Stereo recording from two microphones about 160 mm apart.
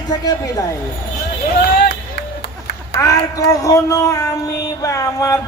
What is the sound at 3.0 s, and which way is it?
A man's voice, 20° left (ahead or behind).